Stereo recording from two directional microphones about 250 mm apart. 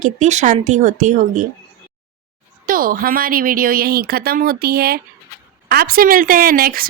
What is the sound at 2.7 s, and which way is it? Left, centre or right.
Speech, right.